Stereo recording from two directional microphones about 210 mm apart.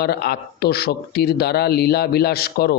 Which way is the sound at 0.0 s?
50° left (ahead or behind).